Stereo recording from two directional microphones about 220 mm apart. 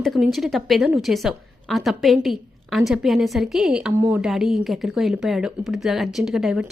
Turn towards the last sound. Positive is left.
turn(degrees=-5)  # may be behind; listen again after turning